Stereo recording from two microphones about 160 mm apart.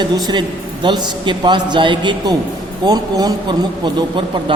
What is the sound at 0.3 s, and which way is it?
A man's voice, 30° right (ahead or behind).